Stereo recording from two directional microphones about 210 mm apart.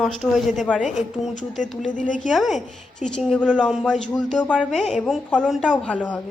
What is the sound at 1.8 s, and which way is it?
Speech, 35° left (ahead or behind).